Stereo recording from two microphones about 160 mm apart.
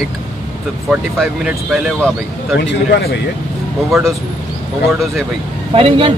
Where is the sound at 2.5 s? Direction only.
85° left.